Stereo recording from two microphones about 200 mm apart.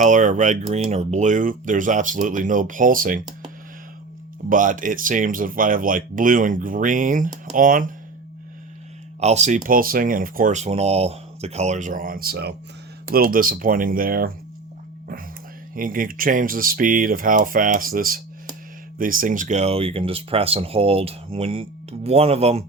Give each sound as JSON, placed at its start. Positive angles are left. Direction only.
{"t": 0.0, "sound": "speech", "side_deg": -40}
{"t": 4.4, "sound": "speech", "side_deg": -40}
{"t": 9.2, "sound": "speech", "side_deg": -35}
{"t": 15.7, "sound": "speech", "side_deg": -45}